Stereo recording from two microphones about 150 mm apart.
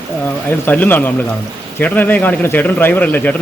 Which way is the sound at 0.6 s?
10° left (ahead or behind).